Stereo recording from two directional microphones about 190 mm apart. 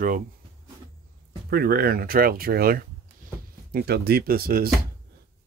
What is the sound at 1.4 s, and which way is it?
Speech, 55° right (ahead or behind).